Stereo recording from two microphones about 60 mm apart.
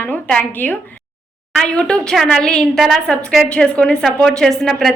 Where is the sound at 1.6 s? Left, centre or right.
Centre.